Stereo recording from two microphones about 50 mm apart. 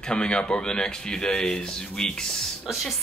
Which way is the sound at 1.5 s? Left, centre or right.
Centre.